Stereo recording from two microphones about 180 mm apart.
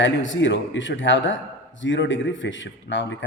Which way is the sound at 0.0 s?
90° left.